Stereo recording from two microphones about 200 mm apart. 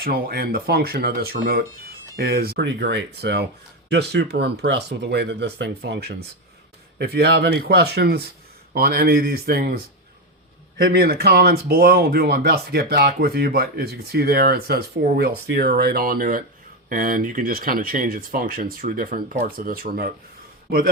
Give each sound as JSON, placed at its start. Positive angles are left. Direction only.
{"t": 0.0, "sound": "a man's voice", "side_deg": -50}